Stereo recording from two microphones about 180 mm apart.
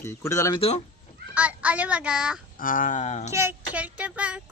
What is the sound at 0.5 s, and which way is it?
Speech, 30° left (ahead or behind).